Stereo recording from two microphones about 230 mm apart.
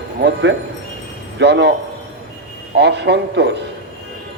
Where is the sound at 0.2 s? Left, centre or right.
Right.